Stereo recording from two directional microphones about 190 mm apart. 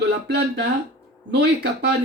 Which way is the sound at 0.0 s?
60° right (ahead or behind).